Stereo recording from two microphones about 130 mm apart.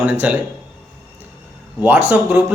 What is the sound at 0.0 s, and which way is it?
Speech, 10° right (ahead or behind).